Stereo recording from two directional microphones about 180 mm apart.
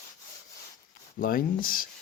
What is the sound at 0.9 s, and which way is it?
Speech, 50° left (ahead or behind).